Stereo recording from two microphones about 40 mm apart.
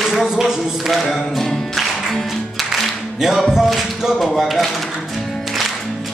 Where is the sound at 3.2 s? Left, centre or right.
Centre.